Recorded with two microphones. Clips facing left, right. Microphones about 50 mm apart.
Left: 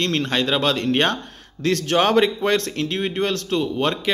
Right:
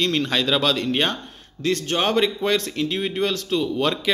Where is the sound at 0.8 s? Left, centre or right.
Left.